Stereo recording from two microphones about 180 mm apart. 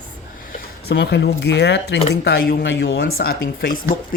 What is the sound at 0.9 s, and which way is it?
Speech, 70° left (ahead or behind).